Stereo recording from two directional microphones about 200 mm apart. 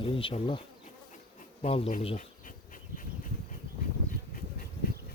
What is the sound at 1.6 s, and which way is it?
Speech, 30° left (ahead or behind).